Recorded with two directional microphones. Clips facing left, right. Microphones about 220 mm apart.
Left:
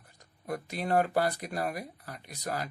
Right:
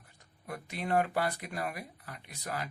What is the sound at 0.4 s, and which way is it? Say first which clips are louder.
Speech: left 4 dB; 40° left (ahead or behind).